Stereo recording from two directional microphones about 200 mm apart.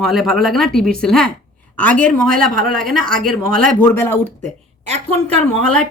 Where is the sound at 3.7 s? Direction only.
10° left (ahead or behind).